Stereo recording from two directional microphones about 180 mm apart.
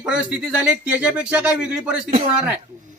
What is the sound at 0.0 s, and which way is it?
Speech, 5° right (ahead or behind).